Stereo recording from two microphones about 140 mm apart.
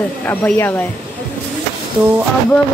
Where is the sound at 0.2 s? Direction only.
10° left (ahead or behind).